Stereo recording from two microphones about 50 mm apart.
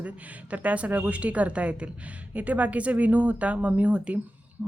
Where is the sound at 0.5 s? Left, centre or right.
Right.